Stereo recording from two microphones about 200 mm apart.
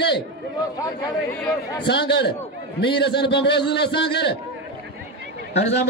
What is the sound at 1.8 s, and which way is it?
A man's voice, 55° left (ahead or behind).